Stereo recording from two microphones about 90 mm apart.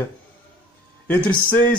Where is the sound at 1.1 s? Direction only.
15° left (ahead or behind).